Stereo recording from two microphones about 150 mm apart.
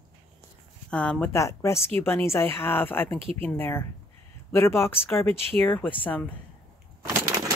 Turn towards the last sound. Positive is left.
turn(degrees=-20)  # may be behind; listen again after turning